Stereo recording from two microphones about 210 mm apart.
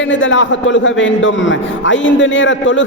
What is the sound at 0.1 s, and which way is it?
A man's voice, 65° left (ahead or behind).